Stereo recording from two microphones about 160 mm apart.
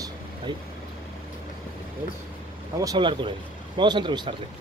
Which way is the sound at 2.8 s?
25° right (ahead or behind).